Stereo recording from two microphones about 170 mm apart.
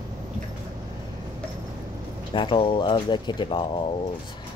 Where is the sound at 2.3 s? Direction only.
30° left (ahead or behind).